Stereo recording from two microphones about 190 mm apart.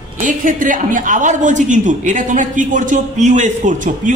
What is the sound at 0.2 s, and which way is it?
A woman's voice, 45° right (ahead or behind).